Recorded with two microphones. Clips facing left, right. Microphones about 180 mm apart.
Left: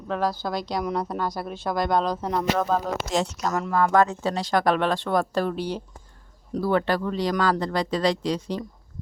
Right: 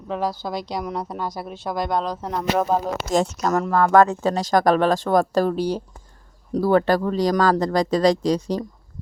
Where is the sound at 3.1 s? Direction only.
45° right (ahead or behind).